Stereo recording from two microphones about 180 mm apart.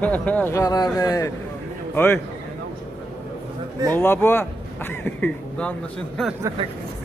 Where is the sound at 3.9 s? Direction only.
10° left (ahead or behind).